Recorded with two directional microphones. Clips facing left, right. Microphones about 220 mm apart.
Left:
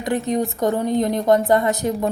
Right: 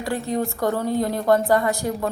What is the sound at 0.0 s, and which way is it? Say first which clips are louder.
A woman's voice: left 3 dB; 20° left (ahead or behind).